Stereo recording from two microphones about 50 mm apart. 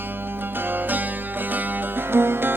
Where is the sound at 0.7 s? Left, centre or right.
Right.